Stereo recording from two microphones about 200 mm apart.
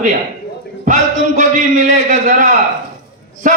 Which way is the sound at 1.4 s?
35° right (ahead or behind).